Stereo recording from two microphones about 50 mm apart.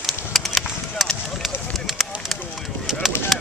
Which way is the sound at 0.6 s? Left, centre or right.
Centre.